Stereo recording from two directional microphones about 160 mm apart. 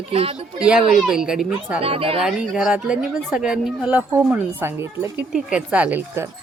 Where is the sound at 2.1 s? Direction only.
Centre (ahead or behind).